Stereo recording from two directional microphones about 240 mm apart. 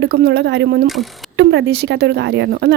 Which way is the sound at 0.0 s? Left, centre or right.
Right.